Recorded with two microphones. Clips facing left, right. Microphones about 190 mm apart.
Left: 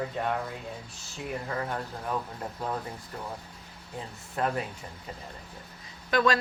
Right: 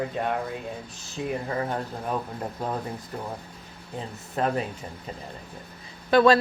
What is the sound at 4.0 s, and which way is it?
Speech, 20° right (ahead or behind).